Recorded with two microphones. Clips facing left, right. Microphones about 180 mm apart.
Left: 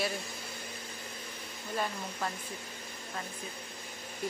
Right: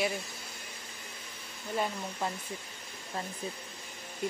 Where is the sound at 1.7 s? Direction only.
15° right (ahead or behind).